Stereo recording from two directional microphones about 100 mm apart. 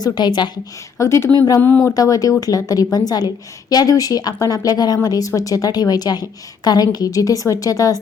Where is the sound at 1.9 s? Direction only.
35° left (ahead or behind).